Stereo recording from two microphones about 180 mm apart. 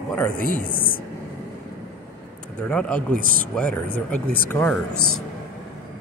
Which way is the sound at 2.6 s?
5° left (ahead or behind).